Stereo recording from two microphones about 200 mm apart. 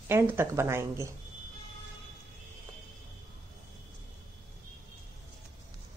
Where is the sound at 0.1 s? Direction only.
10° right (ahead or behind).